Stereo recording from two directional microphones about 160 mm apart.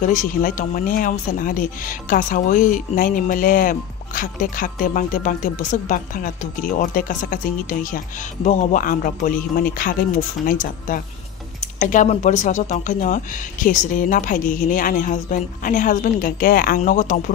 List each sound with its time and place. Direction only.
0.0 s speech: 55° left (ahead or behind)